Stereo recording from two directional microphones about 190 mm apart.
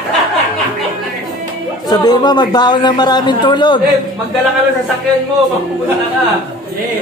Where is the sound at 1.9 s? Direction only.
20° left (ahead or behind).